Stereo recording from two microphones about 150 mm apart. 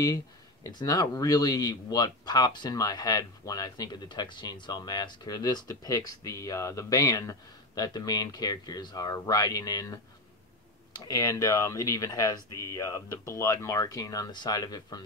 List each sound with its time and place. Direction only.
0.7 s speech: 25° left (ahead or behind)